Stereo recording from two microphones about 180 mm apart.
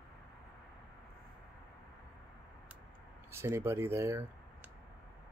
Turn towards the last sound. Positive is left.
turn(degrees=-15)  # may be behind; listen again after turning